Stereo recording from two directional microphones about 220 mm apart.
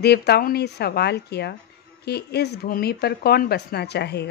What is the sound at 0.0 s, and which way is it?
Speech, 45° left (ahead or behind).